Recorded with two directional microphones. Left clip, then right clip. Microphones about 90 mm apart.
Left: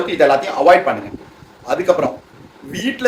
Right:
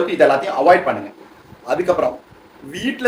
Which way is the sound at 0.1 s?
15° left (ahead or behind).